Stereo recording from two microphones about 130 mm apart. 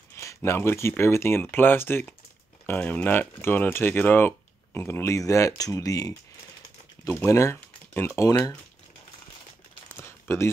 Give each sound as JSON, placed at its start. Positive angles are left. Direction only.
{"t": 0.1, "sound": "speech", "side_deg": 20}
{"t": 7.5, "sound": "typing", "side_deg": 15}
{"t": 8.2, "sound": "speech", "side_deg": 25}
{"t": 9.9, "sound": "a sound", "side_deg": 20}